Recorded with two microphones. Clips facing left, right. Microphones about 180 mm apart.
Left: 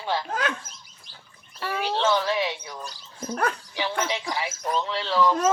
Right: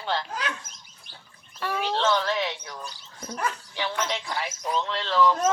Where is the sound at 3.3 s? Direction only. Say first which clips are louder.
Left 4 dB; 55° left (ahead or behind).